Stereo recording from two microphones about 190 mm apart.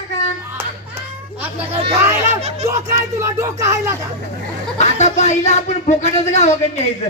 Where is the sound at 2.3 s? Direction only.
35° right (ahead or behind).